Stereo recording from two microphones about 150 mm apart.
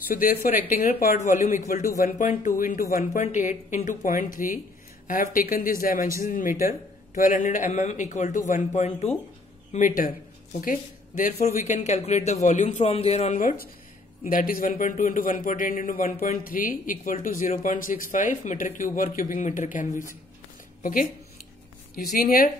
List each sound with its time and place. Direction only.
0.1 s speech: 70° left (ahead or behind)
1.1 s a man's voice: 55° left (ahead or behind)
11.3 s a man's voice: 50° left (ahead or behind); by 21.1 s 65° left (ahead or behind)
22.1 s speech: 70° left (ahead or behind)